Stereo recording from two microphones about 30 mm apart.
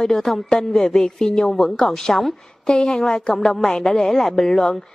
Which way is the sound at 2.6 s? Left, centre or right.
Left.